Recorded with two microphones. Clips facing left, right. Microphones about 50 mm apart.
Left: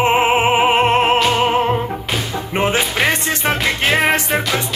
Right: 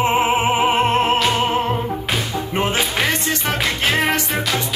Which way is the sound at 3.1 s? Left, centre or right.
Left.